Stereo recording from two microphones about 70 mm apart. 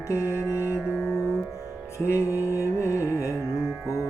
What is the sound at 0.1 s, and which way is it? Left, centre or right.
Music, left.